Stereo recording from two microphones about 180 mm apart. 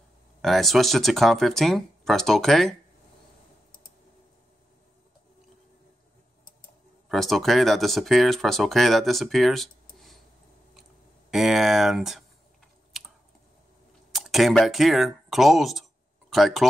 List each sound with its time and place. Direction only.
0.4 s speech: centre (ahead or behind)
7.1 s speech: centre (ahead or behind)
10.8 s typing: centre (ahead or behind)
14.1 s speech: centre (ahead or behind)